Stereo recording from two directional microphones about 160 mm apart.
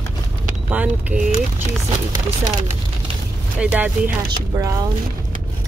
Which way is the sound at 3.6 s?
10° right (ahead or behind).